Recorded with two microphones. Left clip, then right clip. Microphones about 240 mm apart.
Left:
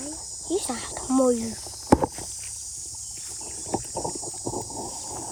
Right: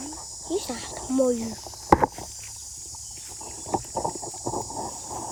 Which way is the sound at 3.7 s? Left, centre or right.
Left.